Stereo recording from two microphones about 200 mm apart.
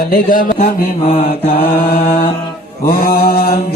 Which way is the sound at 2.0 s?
30° left (ahead or behind).